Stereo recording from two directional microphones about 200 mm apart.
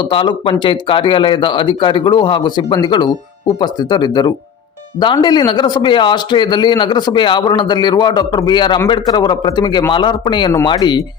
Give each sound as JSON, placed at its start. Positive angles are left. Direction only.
{"t": 0.0, "sound": "a man's voice", "side_deg": 25}